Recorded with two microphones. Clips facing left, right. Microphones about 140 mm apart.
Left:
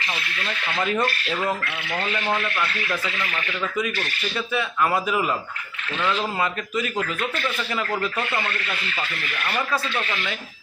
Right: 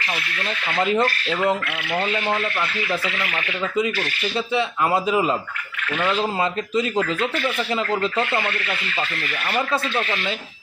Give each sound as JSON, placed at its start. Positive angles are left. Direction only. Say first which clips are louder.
{"t": 0.1, "sound": "a man's voice", "louder": "right 3 dB", "side_deg": -20}
{"t": 9.5, "sound": "a man's voice", "louder": "right 3 dB", "side_deg": -20}